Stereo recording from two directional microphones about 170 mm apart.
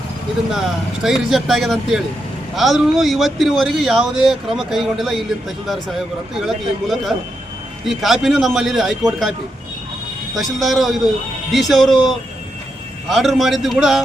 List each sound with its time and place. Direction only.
1.0 s speech: centre (ahead or behind)
6.3 s speech: centre (ahead or behind)
10.3 s speech: centre (ahead or behind)